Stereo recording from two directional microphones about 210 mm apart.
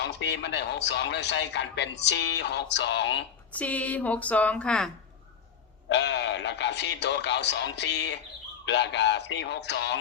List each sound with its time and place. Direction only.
0.0 s a man's voice: 55° left (ahead or behind)
3.5 s a woman's voice: 5° left (ahead or behind)
5.9 s a man's voice: 55° left (ahead or behind)